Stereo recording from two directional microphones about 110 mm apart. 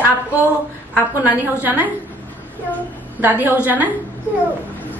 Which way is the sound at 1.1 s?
15° right (ahead or behind).